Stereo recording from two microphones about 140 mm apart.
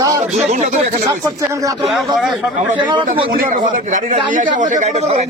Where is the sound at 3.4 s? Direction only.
80° right; by 5.3 s 55° right (ahead or behind).